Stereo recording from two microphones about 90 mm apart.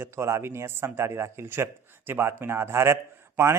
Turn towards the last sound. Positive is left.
turn(degrees=-30)  # may be behind; listen again after turning